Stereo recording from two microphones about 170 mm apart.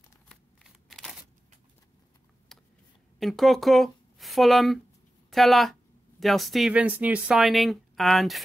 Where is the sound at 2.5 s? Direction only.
5° left (ahead or behind).